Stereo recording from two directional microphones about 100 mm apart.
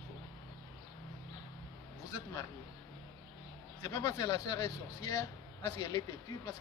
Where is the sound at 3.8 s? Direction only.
40° left (ahead or behind).